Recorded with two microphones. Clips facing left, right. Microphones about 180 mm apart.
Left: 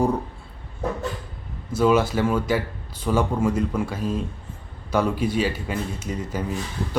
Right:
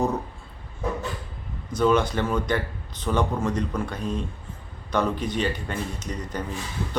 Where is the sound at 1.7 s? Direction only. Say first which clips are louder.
Left 2 dB; 5° left (ahead or behind).